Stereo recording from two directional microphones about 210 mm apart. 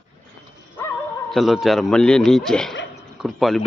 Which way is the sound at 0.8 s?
10° left (ahead or behind).